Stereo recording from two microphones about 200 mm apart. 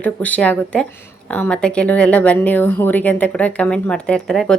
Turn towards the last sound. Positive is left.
turn(degrees=5)  # may be behind; listen again after turning